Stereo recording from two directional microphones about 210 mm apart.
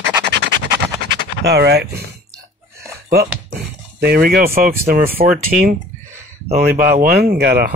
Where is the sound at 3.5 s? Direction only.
45° right (ahead or behind).